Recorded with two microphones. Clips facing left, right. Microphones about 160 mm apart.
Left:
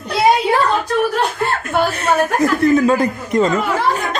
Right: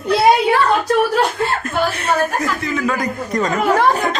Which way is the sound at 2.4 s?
45° left (ahead or behind).